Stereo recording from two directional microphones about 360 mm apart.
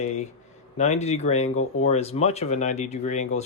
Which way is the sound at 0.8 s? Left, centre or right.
Centre.